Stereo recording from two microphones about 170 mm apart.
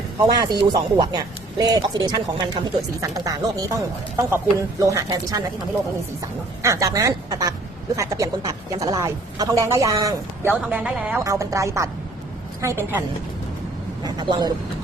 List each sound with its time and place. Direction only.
0.2 s a man's voice: 25° right (ahead or behind)
4.8 s a man's voice: 20° right (ahead or behind)
6.6 s a woman's voice: 20° right (ahead or behind)
14.0 s a man's voice: 25° right (ahead or behind)